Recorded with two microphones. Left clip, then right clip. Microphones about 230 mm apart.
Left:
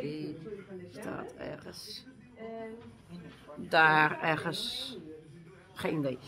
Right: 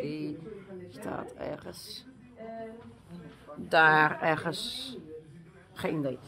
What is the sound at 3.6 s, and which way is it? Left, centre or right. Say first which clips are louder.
A man's voice: right 2 dB; right.